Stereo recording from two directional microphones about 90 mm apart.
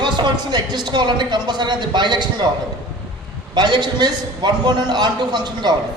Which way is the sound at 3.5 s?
50° right (ahead or behind).